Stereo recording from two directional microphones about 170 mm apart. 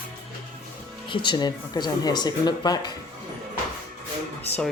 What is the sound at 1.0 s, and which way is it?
Speech, 30° left (ahead or behind).